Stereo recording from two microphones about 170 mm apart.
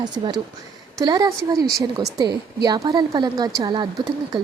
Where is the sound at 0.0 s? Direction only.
25° right (ahead or behind).